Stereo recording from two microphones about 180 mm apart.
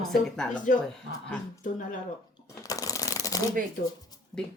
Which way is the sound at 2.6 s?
20° left (ahead or behind).